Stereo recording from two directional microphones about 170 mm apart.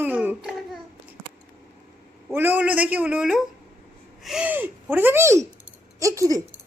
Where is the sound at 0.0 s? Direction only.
10° right (ahead or behind).